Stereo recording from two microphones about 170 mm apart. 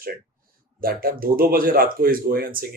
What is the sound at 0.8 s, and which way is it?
Speech, 60° right (ahead or behind).